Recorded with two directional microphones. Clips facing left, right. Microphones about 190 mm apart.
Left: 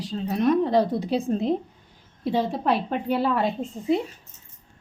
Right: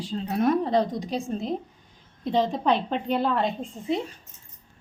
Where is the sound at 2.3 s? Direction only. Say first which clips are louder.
Even; 5° left (ahead or behind).